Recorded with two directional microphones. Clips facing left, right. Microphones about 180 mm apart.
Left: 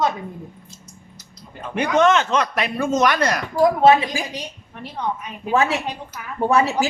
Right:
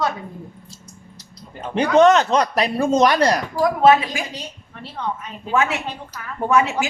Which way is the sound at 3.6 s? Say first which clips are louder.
Left 1 dB; 25° left (ahead or behind).